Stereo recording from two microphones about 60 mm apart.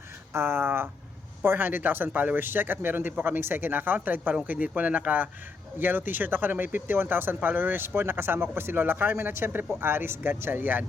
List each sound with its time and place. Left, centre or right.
0.3 s speech: right